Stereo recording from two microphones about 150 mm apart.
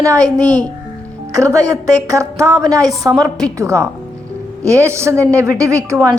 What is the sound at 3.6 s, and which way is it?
A woman's voice, 20° right (ahead or behind).